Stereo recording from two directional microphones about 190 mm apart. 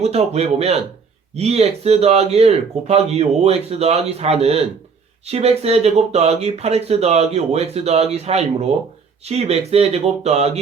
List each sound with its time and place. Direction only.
0.0 s speech: 35° right (ahead or behind)